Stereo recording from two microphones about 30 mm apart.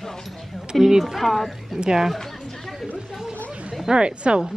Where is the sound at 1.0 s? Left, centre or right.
Centre.